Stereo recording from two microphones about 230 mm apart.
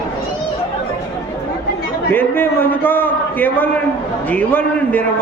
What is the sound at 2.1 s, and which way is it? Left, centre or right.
A man's voice, centre.